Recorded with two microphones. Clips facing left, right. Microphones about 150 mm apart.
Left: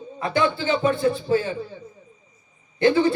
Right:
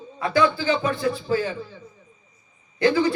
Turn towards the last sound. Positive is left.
turn(degrees=25)  # may be behind; listen again after turning